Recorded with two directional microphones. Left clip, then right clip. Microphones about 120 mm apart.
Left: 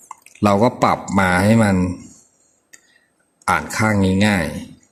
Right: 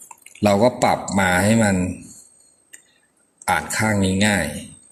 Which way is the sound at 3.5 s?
45° left (ahead or behind).